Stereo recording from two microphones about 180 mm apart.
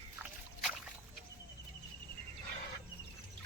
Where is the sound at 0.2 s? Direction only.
10° right (ahead or behind).